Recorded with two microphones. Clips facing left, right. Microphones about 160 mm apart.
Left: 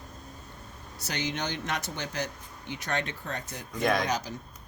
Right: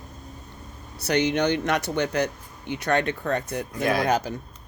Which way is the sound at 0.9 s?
65° right (ahead or behind).